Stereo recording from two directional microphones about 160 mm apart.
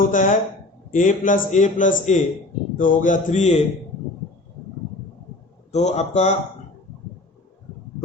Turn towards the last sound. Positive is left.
turn(degrees=45)  # may be behind; listen again after turning